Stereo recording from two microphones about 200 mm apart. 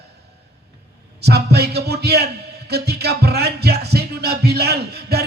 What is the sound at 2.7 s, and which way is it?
Music, 55° right (ahead or behind).